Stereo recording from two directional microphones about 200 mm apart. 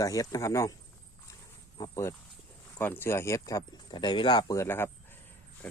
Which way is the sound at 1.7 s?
20° left (ahead or behind).